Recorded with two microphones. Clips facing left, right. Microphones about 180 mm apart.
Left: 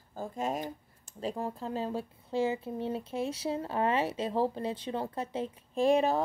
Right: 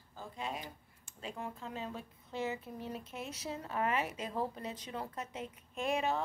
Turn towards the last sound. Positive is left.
turn(degrees=35)  # may be behind; listen again after turning